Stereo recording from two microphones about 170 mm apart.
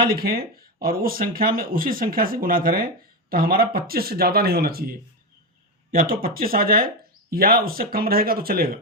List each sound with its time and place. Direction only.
0.0 s speech: 60° right (ahead or behind)